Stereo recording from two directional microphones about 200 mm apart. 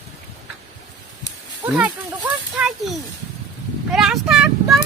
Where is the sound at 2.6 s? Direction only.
5° right (ahead or behind).